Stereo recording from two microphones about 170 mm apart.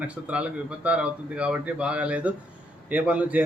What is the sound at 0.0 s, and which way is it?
A man's voice, 10° right (ahead or behind).